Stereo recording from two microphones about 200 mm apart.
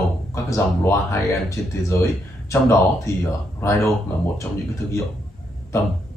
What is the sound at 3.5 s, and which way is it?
Speech, 15° left (ahead or behind).